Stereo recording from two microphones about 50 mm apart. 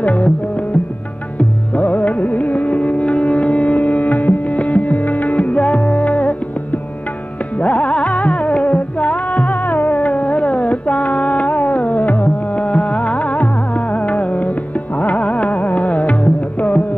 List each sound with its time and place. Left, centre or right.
0.0 s music: left
1.7 s music: left